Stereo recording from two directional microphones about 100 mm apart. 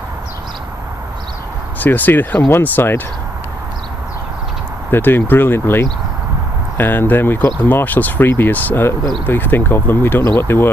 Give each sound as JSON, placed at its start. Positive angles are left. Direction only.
{"t": 1.8, "sound": "speech", "side_deg": 20}
{"t": 4.9, "sound": "speech", "side_deg": 20}